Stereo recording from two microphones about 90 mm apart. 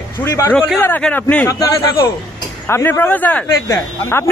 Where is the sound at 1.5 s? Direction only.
45° left (ahead or behind).